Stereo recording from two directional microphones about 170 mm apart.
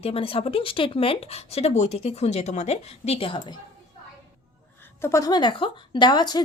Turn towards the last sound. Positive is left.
turn(degrees=25)  # may be behind; listen again after turning